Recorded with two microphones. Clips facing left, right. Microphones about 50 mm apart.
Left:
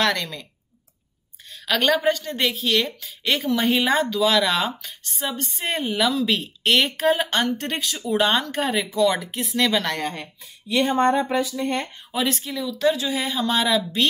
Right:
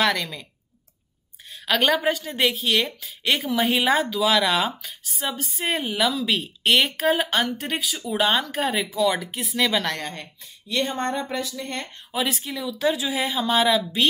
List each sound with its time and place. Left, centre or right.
0.0 s speech: centre
1.5 s a woman's voice: centre
12.1 s a woman's voice: centre